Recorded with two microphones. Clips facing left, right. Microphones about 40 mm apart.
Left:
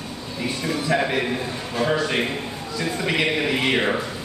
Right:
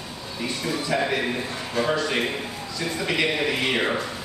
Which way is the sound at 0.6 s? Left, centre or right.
Left.